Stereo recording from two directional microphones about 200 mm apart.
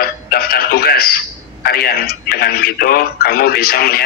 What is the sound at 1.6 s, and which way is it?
Speech, 50° left (ahead or behind).